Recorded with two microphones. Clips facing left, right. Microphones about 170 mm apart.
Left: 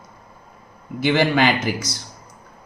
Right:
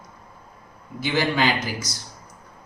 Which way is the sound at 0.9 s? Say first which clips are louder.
Left 5 dB; 60° left (ahead or behind).